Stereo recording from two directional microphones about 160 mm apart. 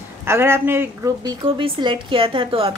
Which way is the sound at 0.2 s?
15° right (ahead or behind).